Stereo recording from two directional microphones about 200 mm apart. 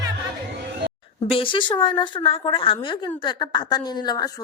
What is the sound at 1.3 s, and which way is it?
A woman's voice, 25° left (ahead or behind).